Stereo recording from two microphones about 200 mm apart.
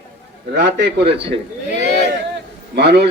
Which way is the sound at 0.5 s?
60° right (ahead or behind).